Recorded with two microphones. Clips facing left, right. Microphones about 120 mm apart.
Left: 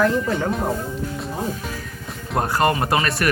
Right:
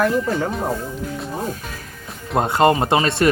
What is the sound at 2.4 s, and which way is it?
Speech, 25° right (ahead or behind).